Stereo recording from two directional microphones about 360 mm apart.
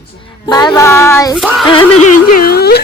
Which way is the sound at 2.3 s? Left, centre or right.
Left.